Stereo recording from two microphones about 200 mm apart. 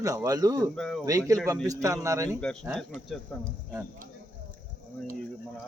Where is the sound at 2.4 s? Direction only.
5° left (ahead or behind).